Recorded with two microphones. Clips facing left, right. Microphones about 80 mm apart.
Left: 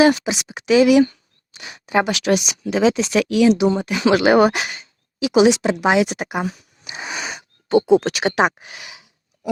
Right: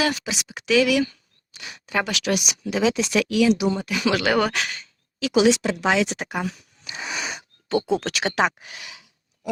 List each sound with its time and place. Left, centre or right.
0.0 s speech: left